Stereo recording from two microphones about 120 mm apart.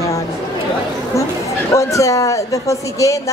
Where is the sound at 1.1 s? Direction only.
25° left (ahead or behind).